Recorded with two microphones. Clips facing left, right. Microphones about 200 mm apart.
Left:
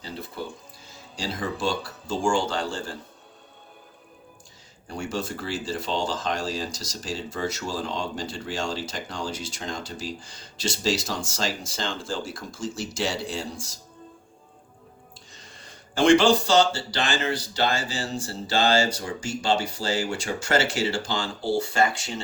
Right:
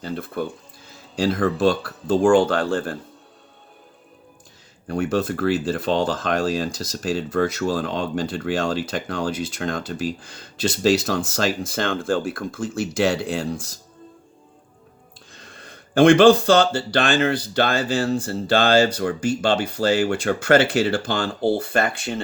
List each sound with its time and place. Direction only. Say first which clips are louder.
0.0 s speech: right 8 dB; 55° right (ahead or behind)
4.9 s speech: right 8 dB; 55° right (ahead or behind)
15.3 s speech: right 8 dB; 55° right (ahead or behind)